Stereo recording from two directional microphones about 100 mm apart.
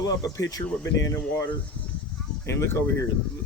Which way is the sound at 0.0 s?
35° left (ahead or behind).